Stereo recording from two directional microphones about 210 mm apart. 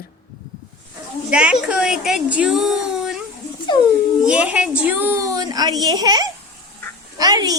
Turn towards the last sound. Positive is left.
turn(degrees=-20)  # may be behind; listen again after turning